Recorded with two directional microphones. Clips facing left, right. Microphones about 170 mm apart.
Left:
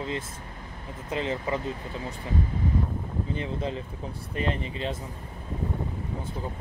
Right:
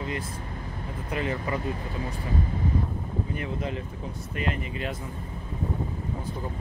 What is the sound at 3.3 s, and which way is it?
Speech, 30° left (ahead or behind).